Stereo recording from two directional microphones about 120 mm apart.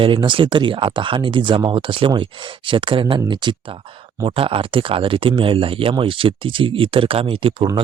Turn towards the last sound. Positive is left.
turn(degrees=-45)  # may be behind; listen again after turning